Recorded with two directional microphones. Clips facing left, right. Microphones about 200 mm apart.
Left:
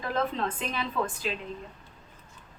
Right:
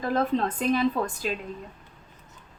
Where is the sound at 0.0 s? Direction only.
40° right (ahead or behind).